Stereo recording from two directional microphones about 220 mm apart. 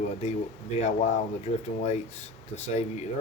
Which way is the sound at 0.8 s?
30° left (ahead or behind).